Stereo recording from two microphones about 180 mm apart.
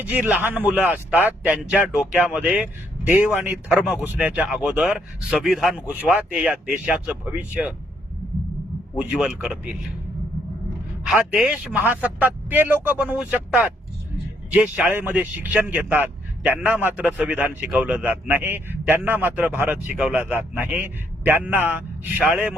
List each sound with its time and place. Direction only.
0.0 s speech: 10° right (ahead or behind)
9.0 s speech: 5° right (ahead or behind)
11.1 s speech: 5° right (ahead or behind)